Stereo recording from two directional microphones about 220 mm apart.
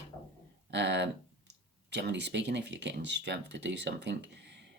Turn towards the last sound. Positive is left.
turn(degrees=-50)  # may be behind; listen again after turning